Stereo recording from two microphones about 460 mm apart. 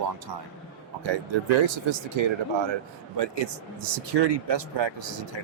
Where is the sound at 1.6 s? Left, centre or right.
Right.